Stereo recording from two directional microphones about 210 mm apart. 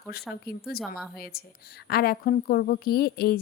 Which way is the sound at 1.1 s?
45° left (ahead or behind).